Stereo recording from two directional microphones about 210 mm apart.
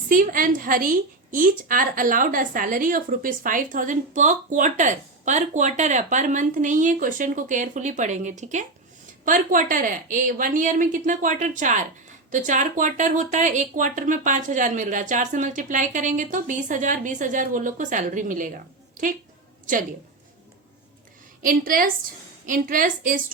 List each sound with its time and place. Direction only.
0.1 s a woman's voice: 40° right (ahead or behind)
21.4 s a woman's voice: 40° right (ahead or behind)